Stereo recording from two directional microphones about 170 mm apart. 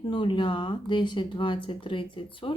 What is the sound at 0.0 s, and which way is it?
Speech, 30° left (ahead or behind).